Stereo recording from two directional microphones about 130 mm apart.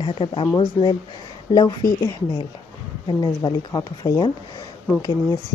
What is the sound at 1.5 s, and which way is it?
Speech, 30° left (ahead or behind).